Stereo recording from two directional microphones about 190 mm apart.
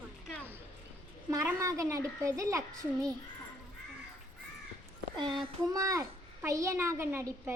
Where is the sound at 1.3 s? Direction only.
15° right (ahead or behind).